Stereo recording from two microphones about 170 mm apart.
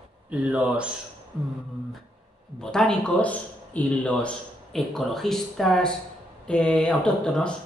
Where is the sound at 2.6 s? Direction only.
5° left (ahead or behind).